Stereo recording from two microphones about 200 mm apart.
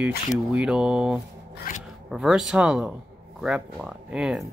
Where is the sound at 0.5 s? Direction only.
5° right (ahead or behind).